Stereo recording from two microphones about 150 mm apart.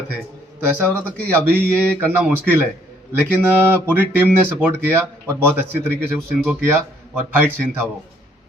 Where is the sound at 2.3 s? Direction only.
15° right (ahead or behind).